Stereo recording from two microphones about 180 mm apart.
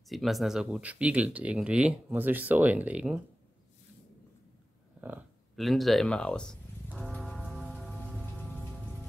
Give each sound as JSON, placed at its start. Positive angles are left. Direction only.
{"t": 0.1, "sound": "speech", "side_deg": 0}
{"t": 5.0, "sound": "a sound", "side_deg": -10}
{"t": 5.6, "sound": "music", "side_deg": 0}